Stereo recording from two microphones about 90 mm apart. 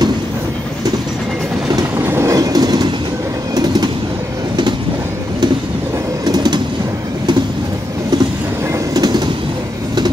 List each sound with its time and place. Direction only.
2.0 s train: 25° right (ahead or behind); by 3.9 s 55° right (ahead or behind)
6.2 s train: 50° right (ahead or behind)
8.7 s train: 45° right (ahead or behind)